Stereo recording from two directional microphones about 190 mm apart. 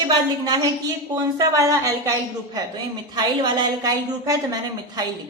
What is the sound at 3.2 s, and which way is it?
A woman's voice, 20° right (ahead or behind).